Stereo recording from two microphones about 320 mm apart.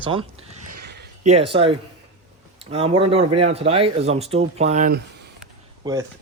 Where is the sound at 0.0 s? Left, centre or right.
Centre.